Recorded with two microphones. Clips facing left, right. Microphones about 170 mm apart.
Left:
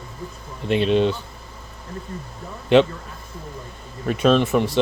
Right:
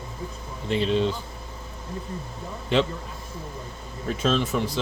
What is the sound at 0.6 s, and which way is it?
Speech, 65° left (ahead or behind).